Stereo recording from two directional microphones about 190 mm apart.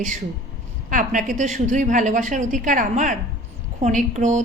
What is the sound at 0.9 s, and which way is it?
A woman's voice, 45° right (ahead or behind).